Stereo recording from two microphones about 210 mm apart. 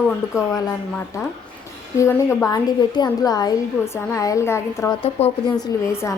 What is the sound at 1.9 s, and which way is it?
A woman's voice, 15° left (ahead or behind).